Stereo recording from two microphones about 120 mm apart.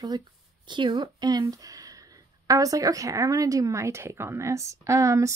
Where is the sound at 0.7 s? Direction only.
40° right (ahead or behind).